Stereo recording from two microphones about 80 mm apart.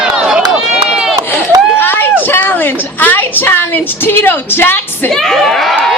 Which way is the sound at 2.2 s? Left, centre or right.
Left.